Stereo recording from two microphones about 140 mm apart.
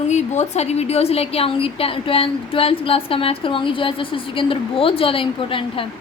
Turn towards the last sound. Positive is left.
turn(degrees=40)  # may be behind; listen again after turning